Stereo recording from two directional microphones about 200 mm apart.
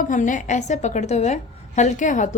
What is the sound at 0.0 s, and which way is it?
A woman's voice, 40° left (ahead or behind).